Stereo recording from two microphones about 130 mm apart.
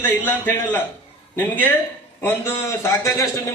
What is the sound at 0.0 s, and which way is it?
A man's voice, 15° left (ahead or behind).